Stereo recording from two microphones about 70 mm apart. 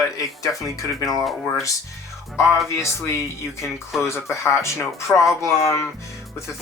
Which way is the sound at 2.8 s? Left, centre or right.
Left.